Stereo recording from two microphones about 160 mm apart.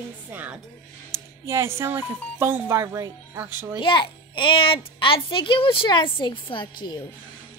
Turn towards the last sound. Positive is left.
turn(degrees=30)  # may be behind; listen again after turning